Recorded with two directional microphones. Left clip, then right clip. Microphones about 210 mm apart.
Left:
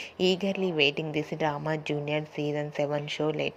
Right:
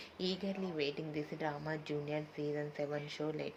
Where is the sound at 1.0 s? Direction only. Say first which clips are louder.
Left 11 dB; 25° left (ahead or behind).